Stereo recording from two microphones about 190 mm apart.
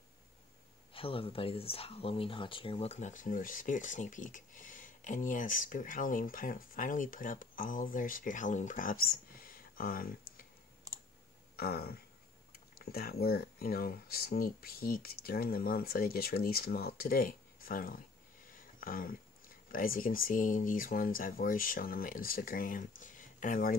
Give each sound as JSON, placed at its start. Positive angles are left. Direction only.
{"t": 0.9, "sound": "speech", "side_deg": 30}
{"t": 10.9, "sound": "clicking", "side_deg": -15}
{"t": 11.5, "sound": "speech", "side_deg": 55}